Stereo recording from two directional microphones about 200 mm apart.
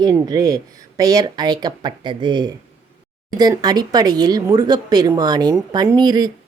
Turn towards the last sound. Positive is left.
turn(degrees=-20)  # may be behind; listen again after turning